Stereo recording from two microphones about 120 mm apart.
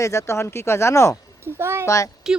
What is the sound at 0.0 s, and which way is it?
Speech, 25° left (ahead or behind).